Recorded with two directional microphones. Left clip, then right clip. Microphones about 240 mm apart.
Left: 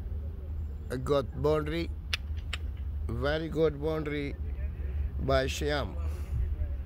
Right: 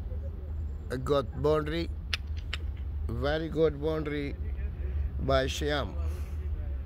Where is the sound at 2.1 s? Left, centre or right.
Centre.